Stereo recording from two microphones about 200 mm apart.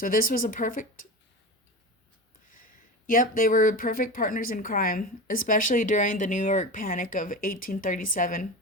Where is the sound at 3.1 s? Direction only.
45° left (ahead or behind).